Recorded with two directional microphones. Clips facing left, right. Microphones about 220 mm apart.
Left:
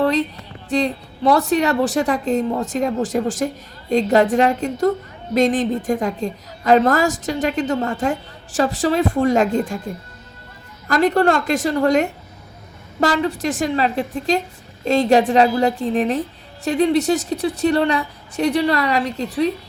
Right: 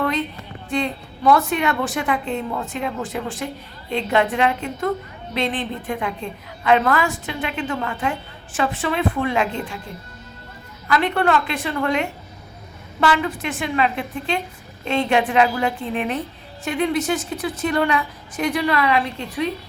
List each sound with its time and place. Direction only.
0.0 s a sound: 35° left (ahead or behind)
0.7 s a woman's voice: 35° left (ahead or behind)
10.8 s a woman's voice: 40° left (ahead or behind)